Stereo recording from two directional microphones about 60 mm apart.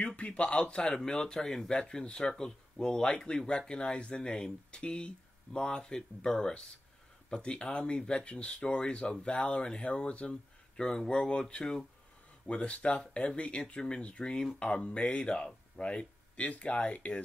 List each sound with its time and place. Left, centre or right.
0.0 s speech: left